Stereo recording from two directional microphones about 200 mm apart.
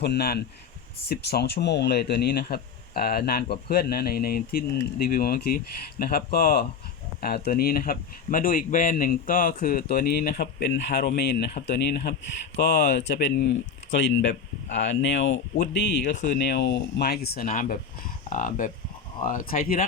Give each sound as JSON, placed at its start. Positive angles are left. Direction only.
{"t": 0.0, "sound": "speech", "side_deg": 55}
{"t": 15.5, "sound": "speech", "side_deg": 50}